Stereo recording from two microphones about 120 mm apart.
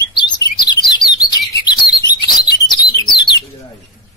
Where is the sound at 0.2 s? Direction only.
40° left (ahead or behind).